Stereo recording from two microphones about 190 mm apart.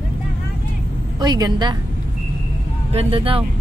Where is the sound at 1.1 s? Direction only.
20° right (ahead or behind).